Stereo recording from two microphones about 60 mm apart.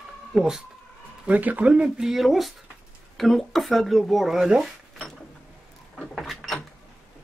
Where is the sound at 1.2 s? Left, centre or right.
Right.